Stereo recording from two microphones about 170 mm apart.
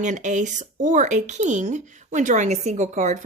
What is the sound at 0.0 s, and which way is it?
A woman's voice, 45° right (ahead or behind).